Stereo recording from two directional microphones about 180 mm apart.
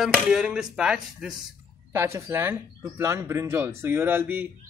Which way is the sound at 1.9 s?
15° right (ahead or behind).